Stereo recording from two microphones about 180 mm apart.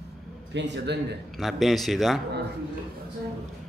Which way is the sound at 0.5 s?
75° right (ahead or behind).